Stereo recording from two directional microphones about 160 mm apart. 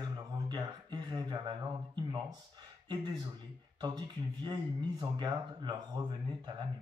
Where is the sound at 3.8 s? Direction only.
25° right (ahead or behind).